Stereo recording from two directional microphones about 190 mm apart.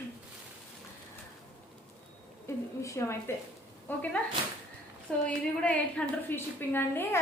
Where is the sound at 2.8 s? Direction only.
15° left (ahead or behind).